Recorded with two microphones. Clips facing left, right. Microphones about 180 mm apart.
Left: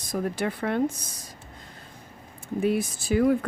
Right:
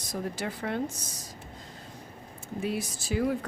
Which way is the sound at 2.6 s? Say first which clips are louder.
Left 7 dB; 55° left (ahead or behind).